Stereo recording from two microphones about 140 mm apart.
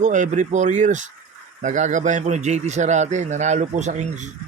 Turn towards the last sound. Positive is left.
turn(degrees=-55)  # may be behind; listen again after turning